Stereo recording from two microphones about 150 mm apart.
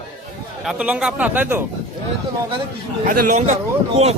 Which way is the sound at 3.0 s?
65° right (ahead or behind).